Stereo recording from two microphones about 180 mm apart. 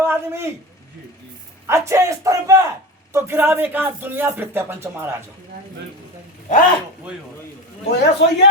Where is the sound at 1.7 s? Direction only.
15° right (ahead or behind).